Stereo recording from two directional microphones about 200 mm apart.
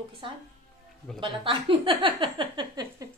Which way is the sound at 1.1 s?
25° right (ahead or behind).